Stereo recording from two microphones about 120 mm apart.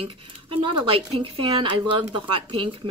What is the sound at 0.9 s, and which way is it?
Speech, 50° right (ahead or behind).